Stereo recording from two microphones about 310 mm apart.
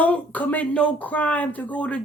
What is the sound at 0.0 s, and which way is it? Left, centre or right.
Speech, centre.